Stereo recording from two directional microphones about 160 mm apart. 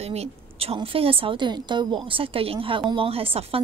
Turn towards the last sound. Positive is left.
turn(degrees=-35)  # may be behind; listen again after turning